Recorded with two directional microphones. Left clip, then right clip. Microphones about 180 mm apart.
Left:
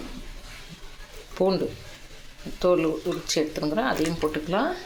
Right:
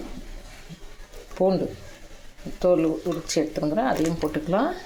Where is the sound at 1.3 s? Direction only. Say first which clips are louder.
Right 1 dB; 10° right (ahead or behind).